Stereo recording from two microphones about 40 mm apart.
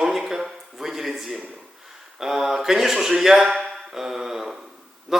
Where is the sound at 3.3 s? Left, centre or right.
Centre.